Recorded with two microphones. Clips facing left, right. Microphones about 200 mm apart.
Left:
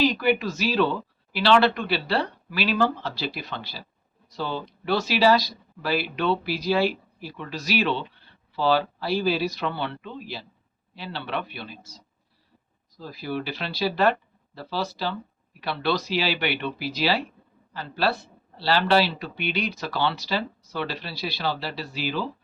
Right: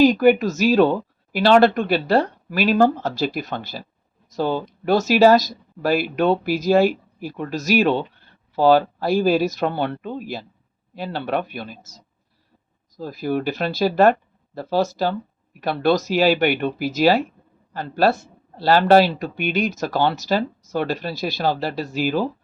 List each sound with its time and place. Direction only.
0.0 s speech: 45° right (ahead or behind)